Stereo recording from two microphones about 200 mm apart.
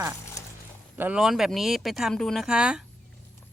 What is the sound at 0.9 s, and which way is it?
Speech, 5° right (ahead or behind).